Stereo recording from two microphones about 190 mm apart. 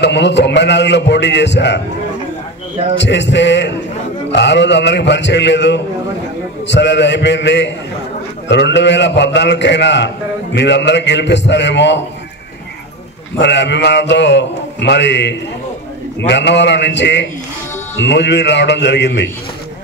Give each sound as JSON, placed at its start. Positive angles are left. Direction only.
{"t": 0.0, "sound": "a man's voice", "side_deg": 65}
{"t": 3.0, "sound": "a man's voice", "side_deg": 70}
{"t": 13.4, "sound": "a man's voice", "side_deg": 65}